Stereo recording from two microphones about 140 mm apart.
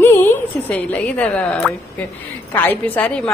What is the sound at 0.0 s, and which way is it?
A woman's voice, 15° left (ahead or behind).